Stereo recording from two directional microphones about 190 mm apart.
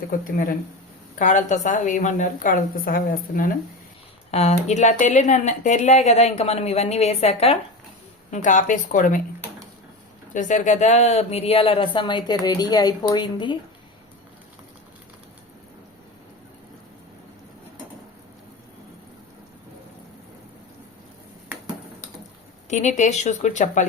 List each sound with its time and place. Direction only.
0.3 s speech: 50° left (ahead or behind)
4.3 s speech: 35° left (ahead or behind)
8.3 s speech: 40° left (ahead or behind)
10.3 s speech: 40° left (ahead or behind); by 13.6 s 25° left (ahead or behind)
22.7 s speech: 40° left (ahead or behind)